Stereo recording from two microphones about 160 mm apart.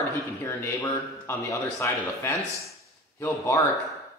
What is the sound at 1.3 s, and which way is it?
A man's voice, 20° left (ahead or behind).